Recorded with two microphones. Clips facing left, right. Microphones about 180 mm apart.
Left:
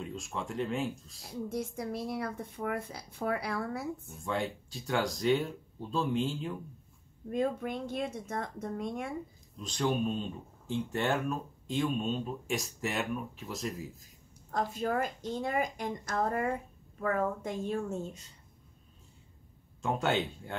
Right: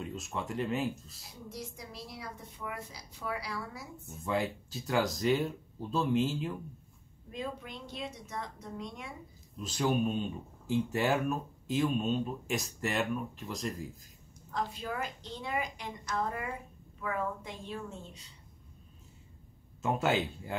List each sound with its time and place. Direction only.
0.0 s speech: centre (ahead or behind)
1.5 s speech: 50° left (ahead or behind)
4.1 s speech: centre (ahead or behind)
7.2 s a woman's voice: 50° left (ahead or behind)
9.6 s speech: 5° right (ahead or behind)
14.5 s a woman's voice: 45° left (ahead or behind)
19.8 s speech: 5° right (ahead or behind)